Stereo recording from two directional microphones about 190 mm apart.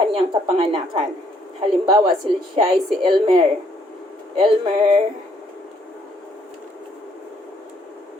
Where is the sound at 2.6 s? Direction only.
30° right (ahead or behind).